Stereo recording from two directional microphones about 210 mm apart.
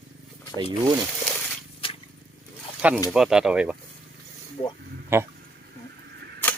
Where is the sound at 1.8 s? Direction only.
25° left (ahead or behind).